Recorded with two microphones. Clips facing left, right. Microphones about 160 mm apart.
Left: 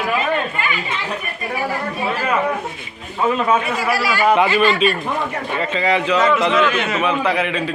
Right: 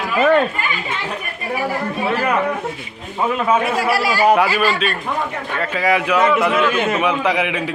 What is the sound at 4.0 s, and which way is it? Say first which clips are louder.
Speech: right 2 dB; 40° right (ahead or behind).